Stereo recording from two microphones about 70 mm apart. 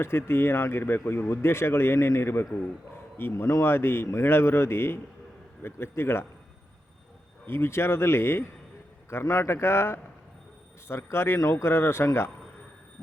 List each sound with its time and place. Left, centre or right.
0.0 s speech: left
7.4 s speech: left
9.2 s speech: left